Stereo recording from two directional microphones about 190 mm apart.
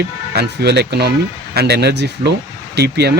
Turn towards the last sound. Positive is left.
turn(degrees=-60)  # may be behind; listen again after turning